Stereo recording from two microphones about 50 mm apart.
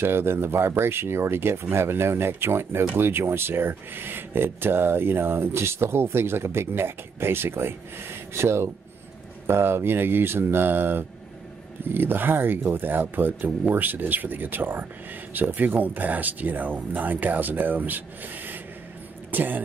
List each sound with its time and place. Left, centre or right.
0.0 s speech: right